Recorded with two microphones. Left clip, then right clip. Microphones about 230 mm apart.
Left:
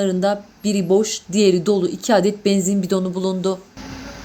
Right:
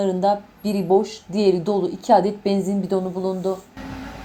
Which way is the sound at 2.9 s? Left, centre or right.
Left.